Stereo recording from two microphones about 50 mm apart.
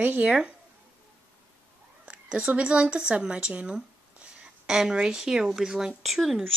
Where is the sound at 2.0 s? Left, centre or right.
Right.